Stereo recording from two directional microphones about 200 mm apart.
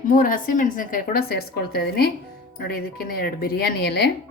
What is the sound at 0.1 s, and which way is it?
A woman's voice, 45° left (ahead or behind).